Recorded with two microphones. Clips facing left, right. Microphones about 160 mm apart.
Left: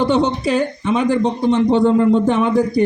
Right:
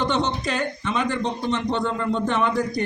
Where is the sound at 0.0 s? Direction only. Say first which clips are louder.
Left 7 dB; 10° left (ahead or behind).